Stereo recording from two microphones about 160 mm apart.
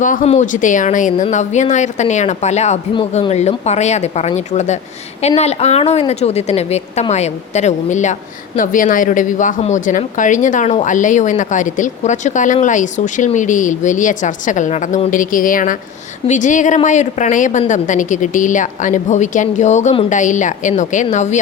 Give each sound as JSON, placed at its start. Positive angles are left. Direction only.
{"t": 0.0, "sound": "a woman's voice", "side_deg": 55}